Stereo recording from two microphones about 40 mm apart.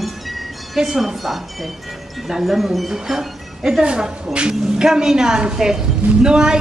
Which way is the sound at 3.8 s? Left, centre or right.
Right.